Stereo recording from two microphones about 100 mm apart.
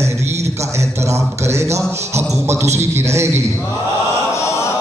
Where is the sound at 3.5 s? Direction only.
25° left (ahead or behind).